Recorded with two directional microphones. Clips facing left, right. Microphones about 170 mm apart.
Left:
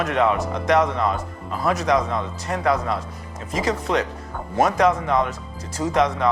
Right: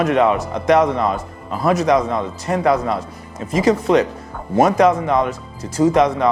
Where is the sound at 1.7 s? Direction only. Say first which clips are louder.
Right 5 dB; 5° right (ahead or behind).